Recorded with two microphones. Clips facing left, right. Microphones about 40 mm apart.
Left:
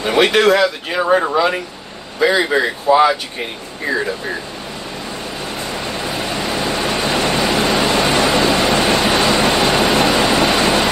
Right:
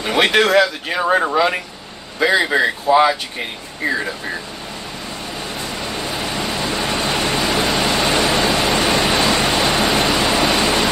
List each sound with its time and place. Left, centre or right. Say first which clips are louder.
0.0 s speech: left 2 dB; centre
0.3 s a man's voice: left 1 dB; centre
6.1 s vehicle: left 2 dB; centre
8.0 s vehicle: left 2 dB; left